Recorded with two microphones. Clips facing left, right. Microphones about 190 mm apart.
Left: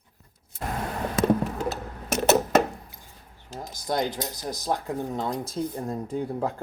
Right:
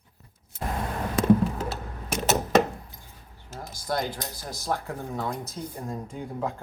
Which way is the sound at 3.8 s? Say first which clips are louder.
Left 2 dB; 20° left (ahead or behind).